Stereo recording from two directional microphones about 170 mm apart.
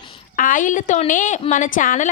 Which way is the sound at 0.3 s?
50° left (ahead or behind).